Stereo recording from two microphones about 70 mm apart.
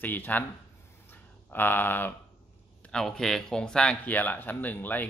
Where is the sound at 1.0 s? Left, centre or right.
Left.